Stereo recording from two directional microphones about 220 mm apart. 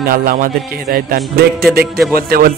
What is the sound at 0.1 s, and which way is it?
A man's voice, 40° right (ahead or behind).